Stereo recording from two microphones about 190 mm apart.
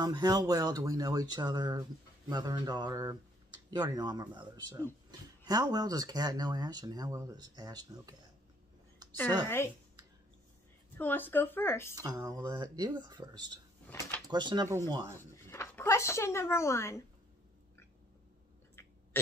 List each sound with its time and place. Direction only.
0.0 s speech: 20° right (ahead or behind)
11.0 s speech: 10° left (ahead or behind)
11.9 s speech: 15° right (ahead or behind)
15.1 s speech: 15° left (ahead or behind)
18.8 s a sound: 15° left (ahead or behind)